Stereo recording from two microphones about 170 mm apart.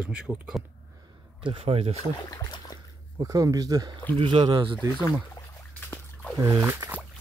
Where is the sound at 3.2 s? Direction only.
20° right (ahead or behind).